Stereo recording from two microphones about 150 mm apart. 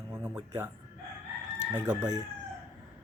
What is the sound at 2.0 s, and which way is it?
Speech, 25° right (ahead or behind).